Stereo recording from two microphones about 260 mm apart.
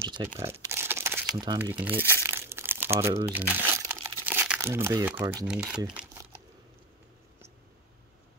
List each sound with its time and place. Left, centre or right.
0.0 s crumpling: centre
5.5 s speech: centre